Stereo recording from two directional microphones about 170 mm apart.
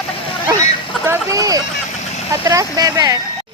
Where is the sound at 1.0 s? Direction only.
20° right (ahead or behind).